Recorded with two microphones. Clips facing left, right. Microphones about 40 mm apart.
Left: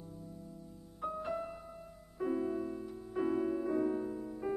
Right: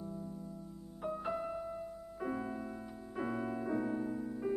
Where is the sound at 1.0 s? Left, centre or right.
Centre.